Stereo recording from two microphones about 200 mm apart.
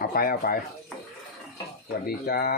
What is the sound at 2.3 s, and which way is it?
Speech, 50° left (ahead or behind).